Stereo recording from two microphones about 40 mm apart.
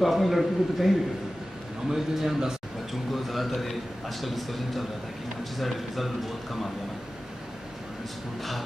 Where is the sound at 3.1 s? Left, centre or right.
Centre.